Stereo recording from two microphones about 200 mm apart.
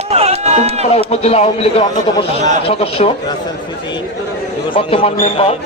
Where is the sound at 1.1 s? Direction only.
30° left (ahead or behind).